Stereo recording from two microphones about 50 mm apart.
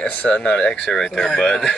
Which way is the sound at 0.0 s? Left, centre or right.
Left.